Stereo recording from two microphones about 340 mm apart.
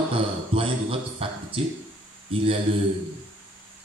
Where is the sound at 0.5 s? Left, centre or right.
Centre.